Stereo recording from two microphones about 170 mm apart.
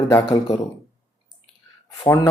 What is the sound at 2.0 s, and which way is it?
Speech, 15° left (ahead or behind).